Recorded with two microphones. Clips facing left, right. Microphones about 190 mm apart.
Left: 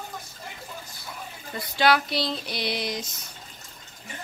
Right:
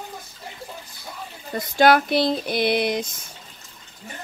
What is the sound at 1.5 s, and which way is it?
A woman's voice, 45° right (ahead or behind).